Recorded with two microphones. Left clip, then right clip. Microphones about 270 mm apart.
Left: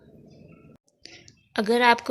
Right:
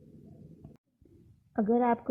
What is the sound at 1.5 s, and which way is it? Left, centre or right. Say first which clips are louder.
Speech: left 8 dB; left.